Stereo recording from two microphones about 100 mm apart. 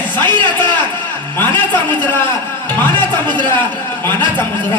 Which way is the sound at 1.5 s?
20° left (ahead or behind).